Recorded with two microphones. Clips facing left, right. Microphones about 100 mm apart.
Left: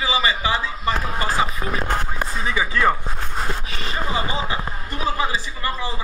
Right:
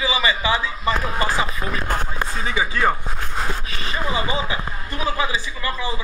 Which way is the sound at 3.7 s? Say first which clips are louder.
Right 1 dB; 40° left (ahead or behind).